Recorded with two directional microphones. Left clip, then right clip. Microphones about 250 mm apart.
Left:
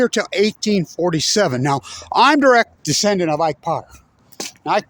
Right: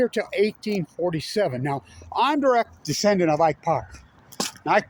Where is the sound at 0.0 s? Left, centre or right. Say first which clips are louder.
Left 5 dB; left.